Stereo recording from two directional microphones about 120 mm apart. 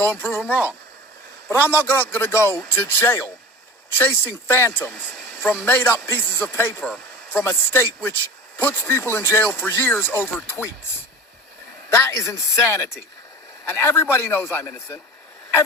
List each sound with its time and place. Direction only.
0.0 s speech: 15° left (ahead or behind)
11.9 s speech: 20° left (ahead or behind)